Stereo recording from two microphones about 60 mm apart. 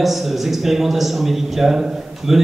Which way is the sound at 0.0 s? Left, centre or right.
Centre.